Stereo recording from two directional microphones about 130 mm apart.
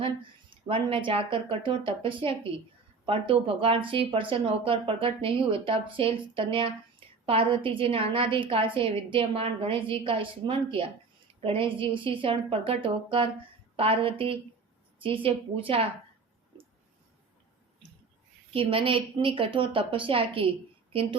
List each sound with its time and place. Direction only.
0.5 s a woman's voice: 45° right (ahead or behind)
18.5 s a woman's voice: 45° right (ahead or behind)